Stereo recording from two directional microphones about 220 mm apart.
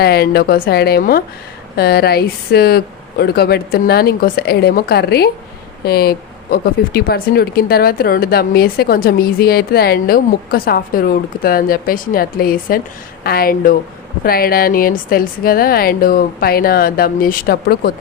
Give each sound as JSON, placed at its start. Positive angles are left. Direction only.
{"t": 0.0, "sound": "speech", "side_deg": 45}